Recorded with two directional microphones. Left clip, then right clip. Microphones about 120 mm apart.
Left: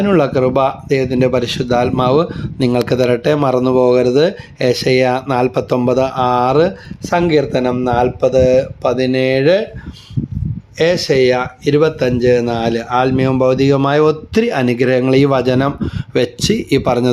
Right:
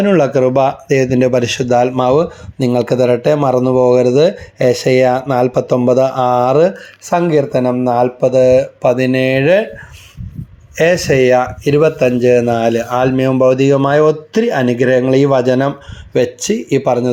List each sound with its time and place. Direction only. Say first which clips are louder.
0.0 s speech: right 2 dB; 10° left (ahead or behind)
10.8 s speech: right 2 dB; centre (ahead or behind); by 17.1 s 30° left (ahead or behind)